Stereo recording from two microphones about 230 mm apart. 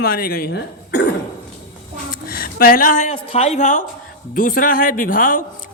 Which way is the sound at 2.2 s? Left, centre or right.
Left.